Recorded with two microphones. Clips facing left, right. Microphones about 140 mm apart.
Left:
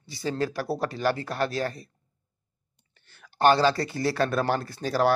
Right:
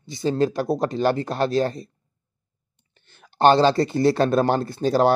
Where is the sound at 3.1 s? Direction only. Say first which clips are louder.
Right 4 dB; 25° right (ahead or behind).